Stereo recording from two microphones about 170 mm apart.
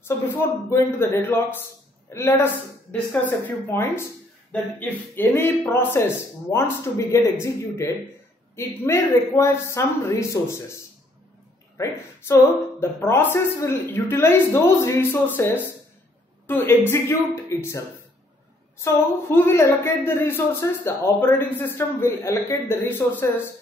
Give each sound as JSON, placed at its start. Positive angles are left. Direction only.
{"t": 0.0, "sound": "a woman's voice", "side_deg": 15}